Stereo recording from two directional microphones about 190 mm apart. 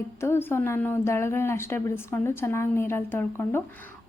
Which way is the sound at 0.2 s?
10° left (ahead or behind).